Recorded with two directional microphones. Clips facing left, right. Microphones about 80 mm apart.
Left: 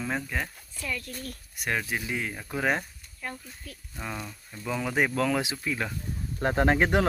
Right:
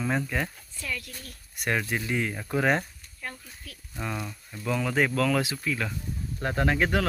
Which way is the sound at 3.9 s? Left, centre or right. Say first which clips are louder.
Right 3 dB; centre.